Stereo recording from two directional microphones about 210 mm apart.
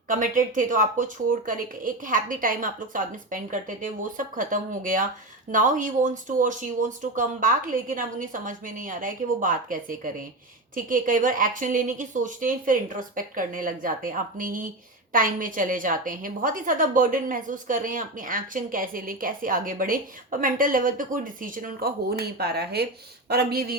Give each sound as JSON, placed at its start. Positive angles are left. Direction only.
{"t": 0.1, "sound": "a woman's voice", "side_deg": -40}